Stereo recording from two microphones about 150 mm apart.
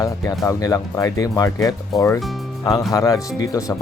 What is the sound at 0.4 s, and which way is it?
Speech, 20° left (ahead or behind).